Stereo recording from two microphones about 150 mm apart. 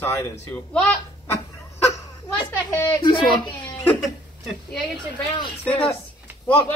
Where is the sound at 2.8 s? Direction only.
30° left (ahead or behind).